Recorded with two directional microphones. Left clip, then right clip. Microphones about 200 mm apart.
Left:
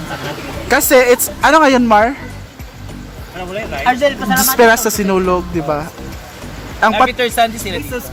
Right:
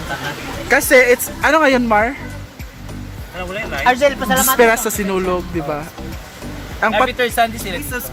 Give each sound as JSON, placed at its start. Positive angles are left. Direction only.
{"t": 0.7, "sound": "speech", "side_deg": 5}
{"t": 3.5, "sound": "speech", "side_deg": -55}
{"t": 4.5, "sound": "speech", "side_deg": 5}